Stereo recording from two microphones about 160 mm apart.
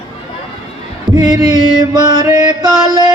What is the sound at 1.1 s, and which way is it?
Music, 25° right (ahead or behind).